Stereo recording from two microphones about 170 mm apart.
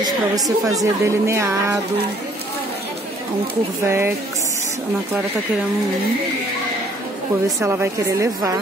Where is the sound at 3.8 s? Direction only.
15° right (ahead or behind).